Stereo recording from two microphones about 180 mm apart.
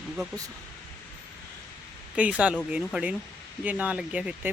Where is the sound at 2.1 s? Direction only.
10° right (ahead or behind).